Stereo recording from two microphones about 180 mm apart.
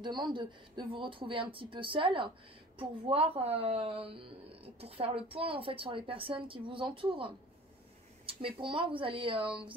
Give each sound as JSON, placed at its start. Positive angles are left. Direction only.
{"t": 0.3, "sound": "a woman's voice", "side_deg": -25}